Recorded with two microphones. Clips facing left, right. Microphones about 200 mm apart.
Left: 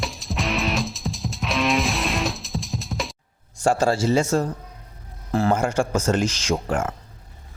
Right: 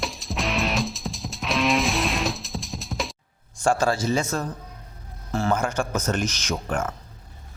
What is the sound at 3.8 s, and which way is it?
Speech, 30° left (ahead or behind).